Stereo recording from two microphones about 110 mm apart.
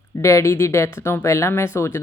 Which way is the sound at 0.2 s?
25° left (ahead or behind).